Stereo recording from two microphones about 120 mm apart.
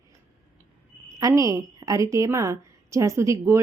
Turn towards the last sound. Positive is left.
turn(degrees=-25)  # may be behind; listen again after turning